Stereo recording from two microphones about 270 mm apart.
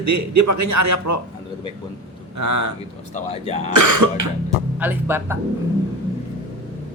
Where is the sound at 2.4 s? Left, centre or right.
Right.